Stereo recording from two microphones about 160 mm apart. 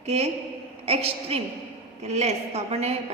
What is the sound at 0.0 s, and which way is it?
A woman's voice, 40° right (ahead or behind).